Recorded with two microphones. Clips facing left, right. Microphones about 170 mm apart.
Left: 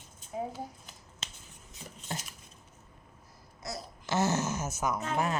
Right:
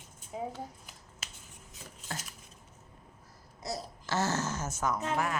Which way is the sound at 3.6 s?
35° right (ahead or behind).